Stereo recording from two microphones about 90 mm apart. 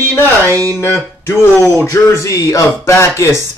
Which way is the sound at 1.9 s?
30° left (ahead or behind).